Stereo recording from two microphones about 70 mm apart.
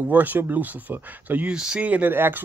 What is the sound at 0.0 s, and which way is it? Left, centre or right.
Speech, right.